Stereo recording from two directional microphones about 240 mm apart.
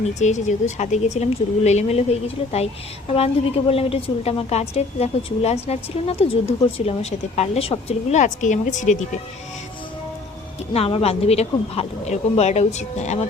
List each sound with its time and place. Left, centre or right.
0.0 s a woman's voice: left
3.7 s a woman's voice: left
10.8 s a woman's voice: left